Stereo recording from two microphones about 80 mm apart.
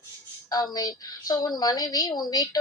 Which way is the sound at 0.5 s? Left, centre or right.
Left.